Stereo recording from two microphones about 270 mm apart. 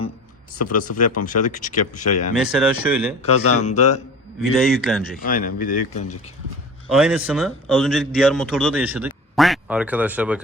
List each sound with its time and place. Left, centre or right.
0.7 s speech: left
2.3 s a man's voice: centre
3.2 s speech: left
3.5 s speech: left
4.5 s a man's voice: centre
5.2 s speech: left
6.9 s a man's voice: centre